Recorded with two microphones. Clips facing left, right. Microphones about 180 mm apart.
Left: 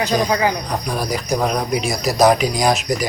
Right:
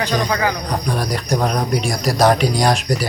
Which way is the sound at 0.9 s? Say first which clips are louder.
Even; 5° left (ahead or behind).